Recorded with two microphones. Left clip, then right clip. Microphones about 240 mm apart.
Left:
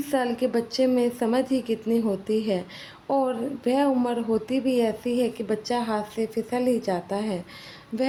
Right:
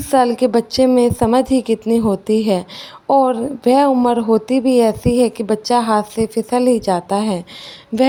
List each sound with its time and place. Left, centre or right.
0.1 s a woman's voice: right